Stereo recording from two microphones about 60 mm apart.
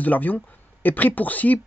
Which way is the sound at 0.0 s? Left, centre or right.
Left.